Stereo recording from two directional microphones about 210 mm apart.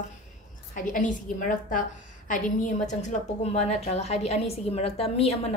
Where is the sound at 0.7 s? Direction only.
40° left (ahead or behind).